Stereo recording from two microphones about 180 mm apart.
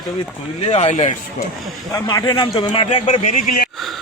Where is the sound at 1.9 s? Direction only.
20° left (ahead or behind); by 3.6 s 40° left (ahead or behind).